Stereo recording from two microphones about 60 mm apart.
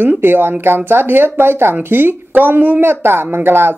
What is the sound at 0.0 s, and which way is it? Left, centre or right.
Speech, right.